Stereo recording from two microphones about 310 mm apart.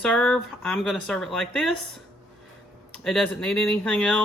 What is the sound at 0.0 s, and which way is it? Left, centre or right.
Speech, centre.